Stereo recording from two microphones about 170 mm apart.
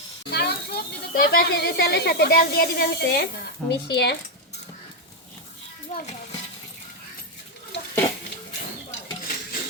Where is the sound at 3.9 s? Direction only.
85° left.